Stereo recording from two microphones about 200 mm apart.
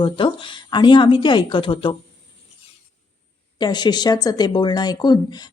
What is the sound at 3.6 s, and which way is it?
A woman's voice, 20° left (ahead or behind).